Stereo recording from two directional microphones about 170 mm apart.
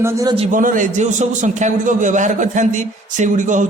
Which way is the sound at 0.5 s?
50° right (ahead or behind).